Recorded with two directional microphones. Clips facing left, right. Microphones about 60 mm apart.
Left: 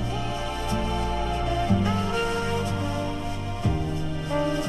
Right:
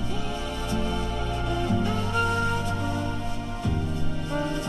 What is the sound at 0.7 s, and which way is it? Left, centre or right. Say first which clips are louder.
Music: left 1 dB; left.